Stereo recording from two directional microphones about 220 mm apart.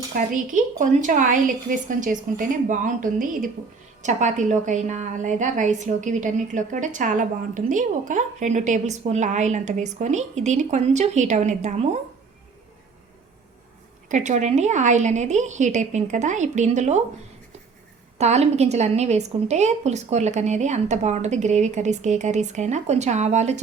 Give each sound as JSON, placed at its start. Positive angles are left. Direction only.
{"t": 0.1, "sound": "a woman's voice", "side_deg": -35}
{"t": 14.1, "sound": "a woman's voice", "side_deg": -35}
{"t": 18.2, "sound": "a woman's voice", "side_deg": -30}